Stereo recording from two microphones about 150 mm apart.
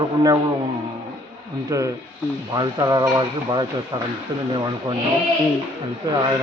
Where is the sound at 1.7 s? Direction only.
20° right (ahead or behind).